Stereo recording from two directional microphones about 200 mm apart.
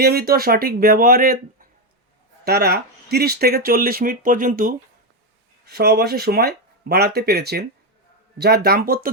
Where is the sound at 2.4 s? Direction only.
50° right (ahead or behind).